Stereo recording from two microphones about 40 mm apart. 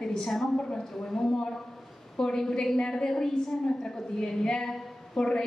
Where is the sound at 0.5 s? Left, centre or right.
Left.